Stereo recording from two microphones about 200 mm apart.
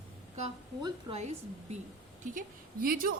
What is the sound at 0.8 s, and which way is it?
A woman's voice, 30° right (ahead or behind).